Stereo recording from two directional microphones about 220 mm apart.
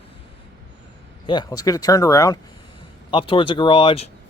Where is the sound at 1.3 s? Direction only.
20° left (ahead or behind).